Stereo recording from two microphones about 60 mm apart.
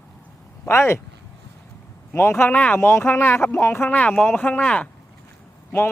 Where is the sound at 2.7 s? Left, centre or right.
Left.